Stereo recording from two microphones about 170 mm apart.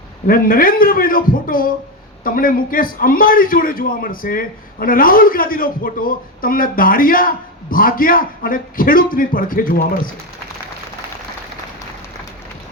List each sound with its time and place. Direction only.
0.3 s a man's voice: 60° left (ahead or behind)